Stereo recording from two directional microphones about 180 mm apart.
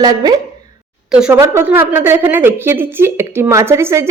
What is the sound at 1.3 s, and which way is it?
A man's voice, 15° right (ahead or behind).